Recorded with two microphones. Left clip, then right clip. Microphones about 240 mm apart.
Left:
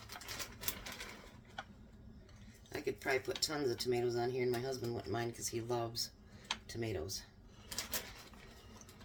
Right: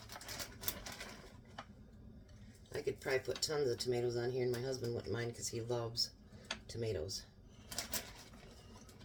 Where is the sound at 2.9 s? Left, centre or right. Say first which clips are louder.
Left 1 dB; left.